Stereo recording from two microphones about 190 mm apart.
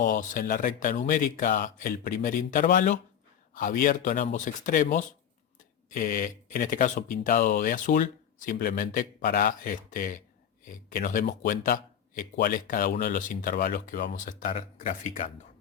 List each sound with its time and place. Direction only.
0.0 s speech: 40° left (ahead or behind)